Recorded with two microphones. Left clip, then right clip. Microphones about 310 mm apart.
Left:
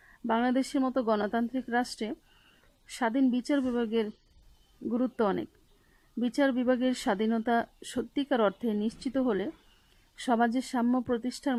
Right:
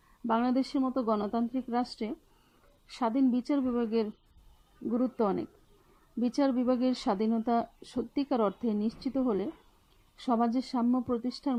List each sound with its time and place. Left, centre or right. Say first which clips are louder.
0.3 s speech: left 1 dB; left